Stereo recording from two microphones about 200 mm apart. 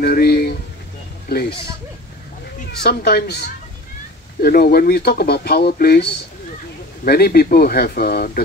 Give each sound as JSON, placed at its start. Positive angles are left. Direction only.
{"t": 0.0, "sound": "speech", "side_deg": 50}
{"t": 2.8, "sound": "speech", "side_deg": 50}
{"t": 7.1, "sound": "speech", "side_deg": 50}